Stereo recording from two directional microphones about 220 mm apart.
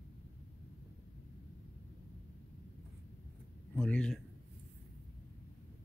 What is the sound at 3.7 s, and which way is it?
Speech, 5° left (ahead or behind).